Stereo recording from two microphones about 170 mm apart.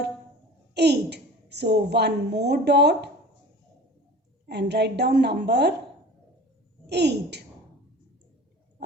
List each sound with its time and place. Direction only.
0.7 s a woman's voice: 80° right
4.4 s a woman's voice: 75° right (ahead or behind)
6.8 s a woman's voice: 80° right